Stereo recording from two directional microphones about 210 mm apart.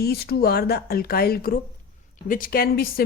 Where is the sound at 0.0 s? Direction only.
50° left (ahead or behind).